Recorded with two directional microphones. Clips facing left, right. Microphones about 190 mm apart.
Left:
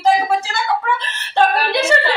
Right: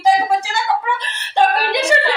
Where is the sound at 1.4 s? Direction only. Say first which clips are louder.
Even; 15° right (ahead or behind).